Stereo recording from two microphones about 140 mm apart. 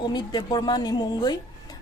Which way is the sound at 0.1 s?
30° left (ahead or behind).